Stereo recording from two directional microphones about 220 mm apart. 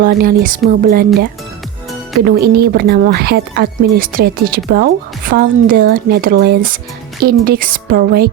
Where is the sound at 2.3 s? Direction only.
45° right (ahead or behind).